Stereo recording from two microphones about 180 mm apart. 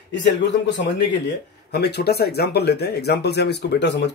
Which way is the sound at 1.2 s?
65° left (ahead or behind).